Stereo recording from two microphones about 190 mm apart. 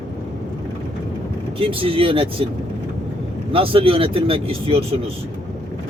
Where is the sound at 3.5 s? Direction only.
30° right (ahead or behind).